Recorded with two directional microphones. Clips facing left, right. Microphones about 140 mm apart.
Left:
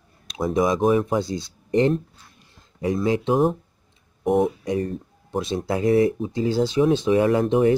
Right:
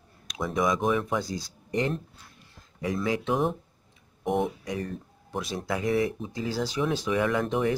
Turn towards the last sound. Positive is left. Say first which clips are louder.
# left 7 dB
turn(degrees=25)  # may be behind; listen again after turning